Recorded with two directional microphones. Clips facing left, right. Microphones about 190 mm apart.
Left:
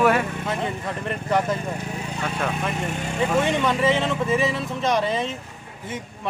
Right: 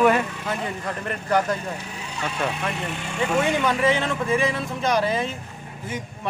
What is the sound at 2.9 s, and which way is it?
Speech, 40° left (ahead or behind).